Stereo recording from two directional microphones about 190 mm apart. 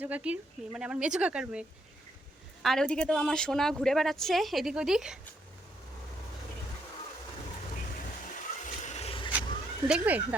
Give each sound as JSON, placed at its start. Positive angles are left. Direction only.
{"t": 0.0, "sound": "a woman's voice", "side_deg": -5}
{"t": 8.6, "sound": "vehicle", "side_deg": 40}
{"t": 9.8, "sound": "speech", "side_deg": -5}